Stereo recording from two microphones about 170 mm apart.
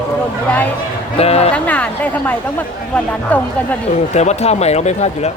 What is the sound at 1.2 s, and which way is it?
Speech, 40° left (ahead or behind).